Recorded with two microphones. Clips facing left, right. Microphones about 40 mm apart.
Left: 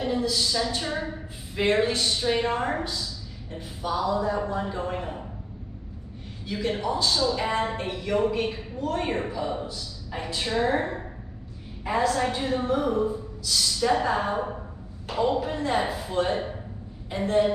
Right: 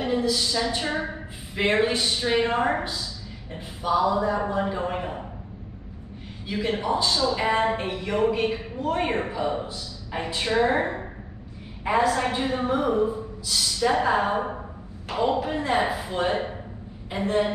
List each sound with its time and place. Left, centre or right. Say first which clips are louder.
0.0 s a woman's voice: right 2 dB; centre
6.4 s a woman's voice: right 1 dB; centre